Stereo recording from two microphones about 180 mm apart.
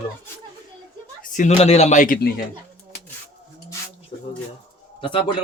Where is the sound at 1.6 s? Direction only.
35° left (ahead or behind).